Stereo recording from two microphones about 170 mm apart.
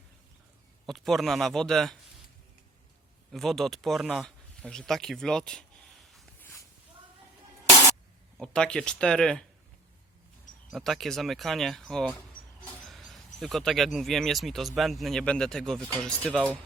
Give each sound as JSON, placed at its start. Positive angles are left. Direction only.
{"t": 0.9, "sound": "speech", "side_deg": 0}
{"t": 3.3, "sound": "speech", "side_deg": 0}
{"t": 6.4, "sound": "a sound", "side_deg": 20}
{"t": 8.4, "sound": "speech", "side_deg": 5}
{"t": 10.7, "sound": "speech", "side_deg": 0}